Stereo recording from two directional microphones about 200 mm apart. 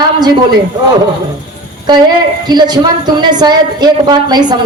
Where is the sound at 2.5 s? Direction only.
20° right (ahead or behind).